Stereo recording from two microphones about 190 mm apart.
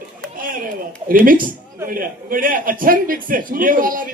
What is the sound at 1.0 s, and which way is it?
A man's voice, 45° right (ahead or behind).